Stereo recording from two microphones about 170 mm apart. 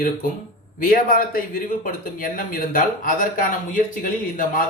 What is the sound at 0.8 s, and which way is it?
Speech, 55° left (ahead or behind).